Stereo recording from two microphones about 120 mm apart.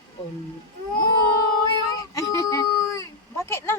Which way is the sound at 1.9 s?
30° left (ahead or behind).